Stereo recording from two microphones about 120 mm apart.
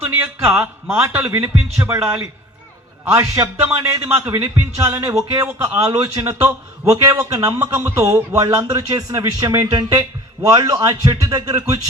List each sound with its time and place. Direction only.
0.3 s a man's voice: 15° right (ahead or behind)